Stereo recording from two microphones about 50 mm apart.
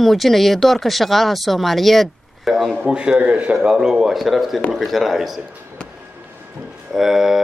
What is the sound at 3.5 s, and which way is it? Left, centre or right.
A man's voice, centre.